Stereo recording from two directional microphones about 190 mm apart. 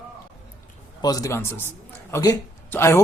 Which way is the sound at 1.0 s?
20° left (ahead or behind).